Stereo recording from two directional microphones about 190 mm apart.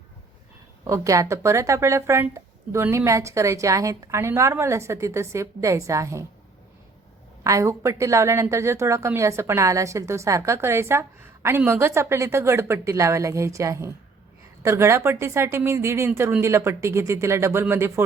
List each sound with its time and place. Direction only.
0.9 s a woman's voice: 15° right (ahead or behind)
7.4 s a woman's voice: 15° right (ahead or behind)